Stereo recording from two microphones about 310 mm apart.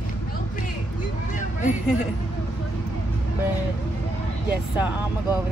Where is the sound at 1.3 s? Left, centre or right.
Left.